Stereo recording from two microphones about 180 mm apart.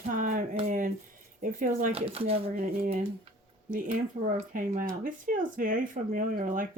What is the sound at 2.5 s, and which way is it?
Speech, 55° right (ahead or behind).